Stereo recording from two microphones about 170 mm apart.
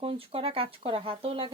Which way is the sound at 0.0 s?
35° right (ahead or behind).